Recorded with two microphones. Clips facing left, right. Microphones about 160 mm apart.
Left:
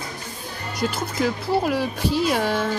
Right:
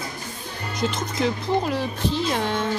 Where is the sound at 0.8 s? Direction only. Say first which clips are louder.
Left 1 dB; 10° left (ahead or behind).